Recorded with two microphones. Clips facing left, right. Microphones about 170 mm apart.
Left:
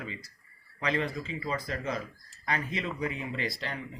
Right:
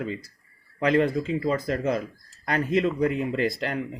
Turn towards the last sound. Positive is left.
turn(degrees=-50)  # may be behind; listen again after turning